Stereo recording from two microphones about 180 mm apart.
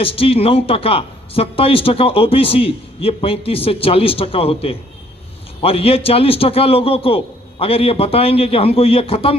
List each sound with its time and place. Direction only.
0.0 s speech: 30° left (ahead or behind)